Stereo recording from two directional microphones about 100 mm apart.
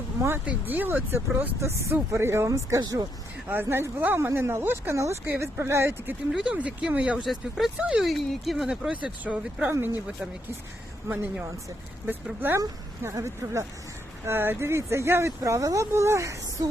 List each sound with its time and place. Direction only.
0.4 s speech: 20° right (ahead or behind)
1.6 s speech: 30° right (ahead or behind)
3.5 s speech: 20° right (ahead or behind)
6.3 s speech: 10° right (ahead or behind)
8.0 s speech: centre (ahead or behind); by 9.7 s 15° right (ahead or behind)
12.0 s speech: 20° right (ahead or behind)